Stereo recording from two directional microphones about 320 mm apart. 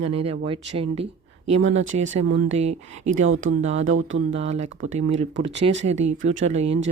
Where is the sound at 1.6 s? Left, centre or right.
Right.